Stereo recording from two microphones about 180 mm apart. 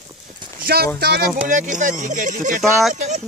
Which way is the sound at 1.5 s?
45° right (ahead or behind).